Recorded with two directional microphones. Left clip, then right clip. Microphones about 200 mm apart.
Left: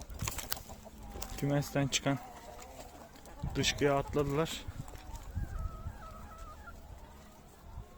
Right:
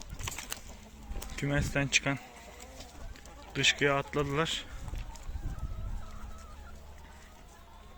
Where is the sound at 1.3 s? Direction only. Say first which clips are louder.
Right 2 dB; 10° left (ahead or behind).